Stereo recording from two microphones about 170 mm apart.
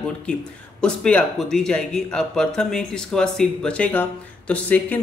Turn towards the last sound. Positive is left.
turn(degrees=10)  # may be behind; listen again after turning